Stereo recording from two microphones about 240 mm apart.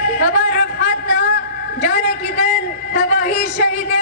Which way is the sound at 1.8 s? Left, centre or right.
Left.